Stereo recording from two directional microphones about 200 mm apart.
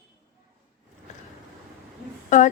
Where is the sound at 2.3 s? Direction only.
40° left (ahead or behind).